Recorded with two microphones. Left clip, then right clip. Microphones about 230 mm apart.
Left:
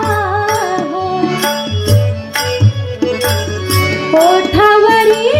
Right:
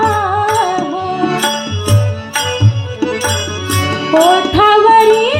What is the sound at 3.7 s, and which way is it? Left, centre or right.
Music, left.